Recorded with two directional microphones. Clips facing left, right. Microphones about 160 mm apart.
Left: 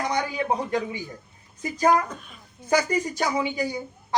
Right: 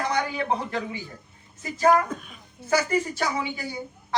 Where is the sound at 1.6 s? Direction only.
15° left (ahead or behind).